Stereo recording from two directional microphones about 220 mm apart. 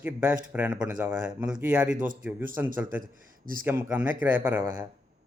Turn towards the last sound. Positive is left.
turn(degrees=-10)  # may be behind; listen again after turning